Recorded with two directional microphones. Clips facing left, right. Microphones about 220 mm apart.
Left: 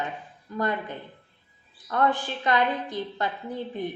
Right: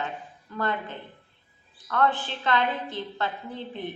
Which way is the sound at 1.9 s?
15° left (ahead or behind).